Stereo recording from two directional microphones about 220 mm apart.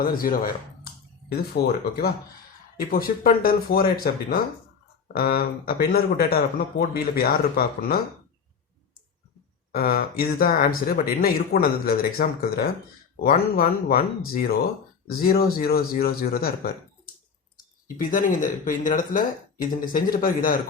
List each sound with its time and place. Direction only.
0.0 s speech: 40° left (ahead or behind)
9.7 s speech: 40° left (ahead or behind)
17.8 s speech: 40° left (ahead or behind)